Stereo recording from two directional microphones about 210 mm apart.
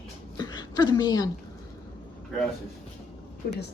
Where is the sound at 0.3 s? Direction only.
20° left (ahead or behind).